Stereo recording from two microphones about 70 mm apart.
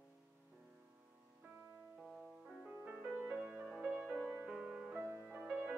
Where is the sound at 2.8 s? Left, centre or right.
Right.